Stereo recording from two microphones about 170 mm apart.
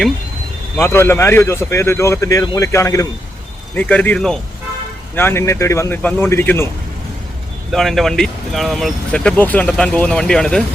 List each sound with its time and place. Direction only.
0.8 s a man's voice: 15° left (ahead or behind)
7.7 s speech: centre (ahead or behind)